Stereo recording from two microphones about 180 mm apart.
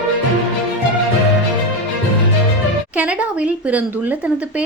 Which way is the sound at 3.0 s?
5° right (ahead or behind).